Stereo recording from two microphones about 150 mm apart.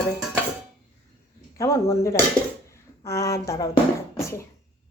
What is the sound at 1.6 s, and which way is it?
A woman's voice, 20° left (ahead or behind).